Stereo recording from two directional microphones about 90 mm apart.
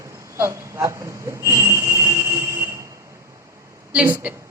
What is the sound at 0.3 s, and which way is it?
Speech, 30° right (ahead or behind).